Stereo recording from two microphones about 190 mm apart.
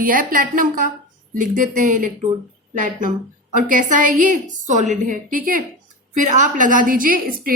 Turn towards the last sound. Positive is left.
turn(degrees=-50)  # may be behind; listen again after turning